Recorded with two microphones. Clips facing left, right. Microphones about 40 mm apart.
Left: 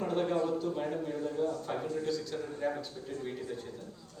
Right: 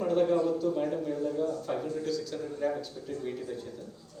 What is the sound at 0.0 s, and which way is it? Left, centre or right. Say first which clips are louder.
A man's voice: right 5 dB; left.